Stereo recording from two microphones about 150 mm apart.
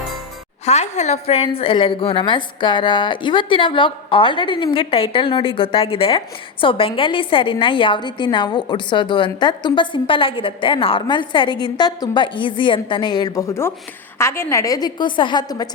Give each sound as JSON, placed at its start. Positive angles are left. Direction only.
{"t": 0.6, "sound": "a woman's voice", "side_deg": 50}